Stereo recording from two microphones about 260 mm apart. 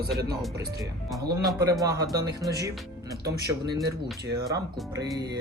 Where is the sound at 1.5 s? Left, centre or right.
Centre.